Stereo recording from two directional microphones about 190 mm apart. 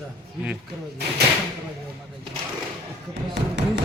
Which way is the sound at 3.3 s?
65° right (ahead or behind).